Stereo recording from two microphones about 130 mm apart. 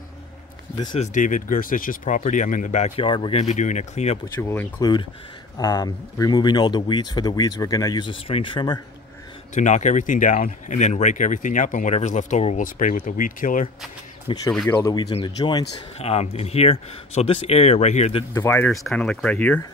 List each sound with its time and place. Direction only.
0.9 s speech: 70° left (ahead or behind); by 2.2 s 90° left
2.2 s speech: 75° left (ahead or behind)
3.0 s speech: 40° left (ahead or behind)
3.4 s speech: 65° left (ahead or behind)
4.4 s speech: 20° left (ahead or behind); by 8.8 s 35° left (ahead or behind)
9.5 s speech: 70° left (ahead or behind); by 13.7 s 90° left
14.2 s speech: 30° left (ahead or behind)
14.7 s speech: 20° left (ahead or behind)
15.2 s speech: 35° left (ahead or behind)
16.0 s speech: 50° left (ahead or behind)
18.3 s speech: 15° left (ahead or behind)
18.7 s speech: 5° left (ahead or behind)